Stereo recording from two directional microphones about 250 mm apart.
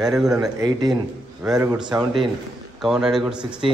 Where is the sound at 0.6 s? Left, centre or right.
Centre.